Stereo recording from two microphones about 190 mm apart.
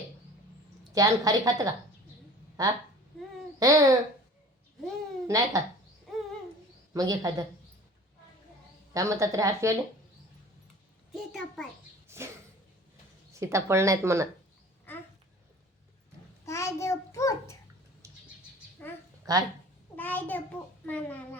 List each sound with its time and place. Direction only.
0.9 s a woman's voice: 20° right (ahead or behind)
5.3 s a woman's voice: 20° right (ahead or behind)
6.9 s a woman's voice: 20° right (ahead or behind)
8.9 s a woman's voice: 15° right (ahead or behind)
11.1 s a child's voice: centre (ahead or behind)
12.0 s a sound: 15° right (ahead or behind)
13.4 s a woman's voice: 15° right (ahead or behind)
16.5 s a child's voice: 15° left (ahead or behind)
19.3 s speech: 20° right (ahead or behind)
20.0 s a child's voice: 10° left (ahead or behind)